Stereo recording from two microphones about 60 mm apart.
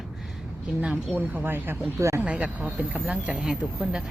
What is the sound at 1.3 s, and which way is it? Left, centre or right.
Speech, right.